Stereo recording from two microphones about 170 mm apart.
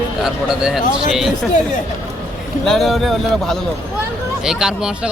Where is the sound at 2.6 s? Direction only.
Centre (ahead or behind).